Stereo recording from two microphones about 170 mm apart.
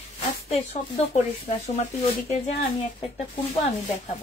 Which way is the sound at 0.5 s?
35° left (ahead or behind).